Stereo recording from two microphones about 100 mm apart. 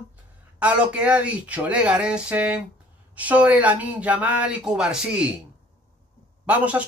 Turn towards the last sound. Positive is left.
turn(degrees=-15)  # may be behind; listen again after turning